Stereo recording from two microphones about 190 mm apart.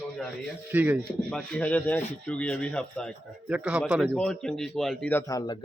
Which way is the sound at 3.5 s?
5° right (ahead or behind).